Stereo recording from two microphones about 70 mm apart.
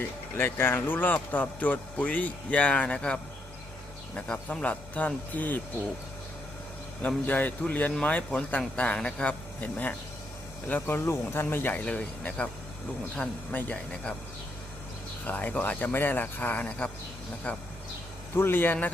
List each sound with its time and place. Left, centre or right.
0.3 s speech: left
7.3 s speech: left
11.5 s speech: left
13.5 s speech: left
15.2 s speech: left
18.3 s speech: left